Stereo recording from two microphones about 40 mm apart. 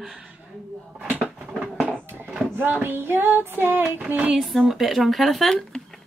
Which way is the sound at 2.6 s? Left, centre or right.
Right.